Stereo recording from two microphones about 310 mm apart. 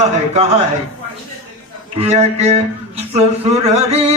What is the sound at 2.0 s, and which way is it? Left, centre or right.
Speech, centre.